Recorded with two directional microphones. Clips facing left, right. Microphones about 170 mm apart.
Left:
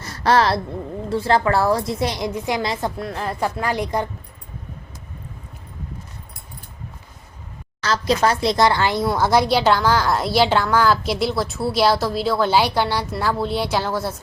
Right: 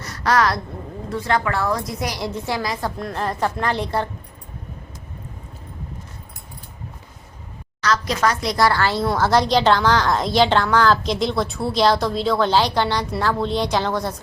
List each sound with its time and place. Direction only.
0.0 s a sound: 30° left (ahead or behind)
1.1 s a woman's voice: 30° left (ahead or behind)
3.0 s a woman's voice: centre (ahead or behind)
7.8 s a woman's voice: 30° left (ahead or behind); by 14.2 s 5° left (ahead or behind)